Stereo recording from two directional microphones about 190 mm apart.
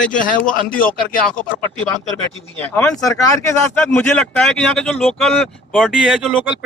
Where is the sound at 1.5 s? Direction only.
5° left (ahead or behind).